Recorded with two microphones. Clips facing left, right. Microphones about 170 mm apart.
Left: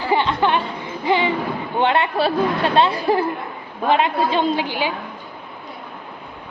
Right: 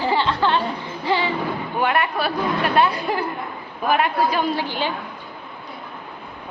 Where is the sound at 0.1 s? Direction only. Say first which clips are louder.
Left 4 dB; 15° left (ahead or behind).